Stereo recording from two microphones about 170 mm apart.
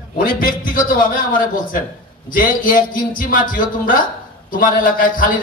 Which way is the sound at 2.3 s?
55° left (ahead or behind).